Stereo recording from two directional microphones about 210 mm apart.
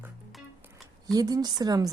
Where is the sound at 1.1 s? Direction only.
20° right (ahead or behind).